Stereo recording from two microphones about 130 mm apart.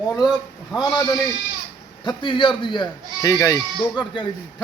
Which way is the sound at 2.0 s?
40° left (ahead or behind).